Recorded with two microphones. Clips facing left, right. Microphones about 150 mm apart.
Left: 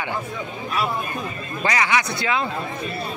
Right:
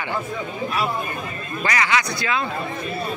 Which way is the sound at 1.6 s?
20° left (ahead or behind).